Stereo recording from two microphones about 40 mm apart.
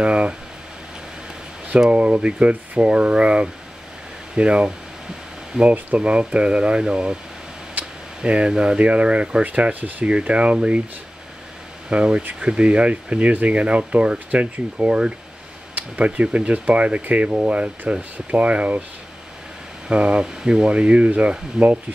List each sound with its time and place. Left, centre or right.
0.0 s speech: right
1.9 s speech: right
8.2 s speech: right
10.0 s speech: right
11.9 s speech: right
19.9 s speech: right